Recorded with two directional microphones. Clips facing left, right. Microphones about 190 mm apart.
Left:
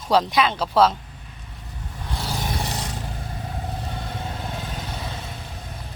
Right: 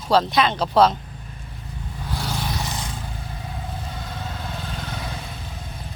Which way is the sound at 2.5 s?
35° left (ahead or behind).